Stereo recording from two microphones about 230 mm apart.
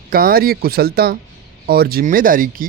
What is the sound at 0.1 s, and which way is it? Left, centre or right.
Speech, right.